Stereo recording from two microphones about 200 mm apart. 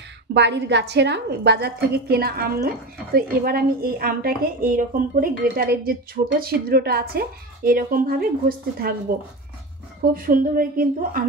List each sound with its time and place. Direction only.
0.3 s a woman's voice: 60° right (ahead or behind)
10.1 s a woman's voice: 45° right (ahead or behind)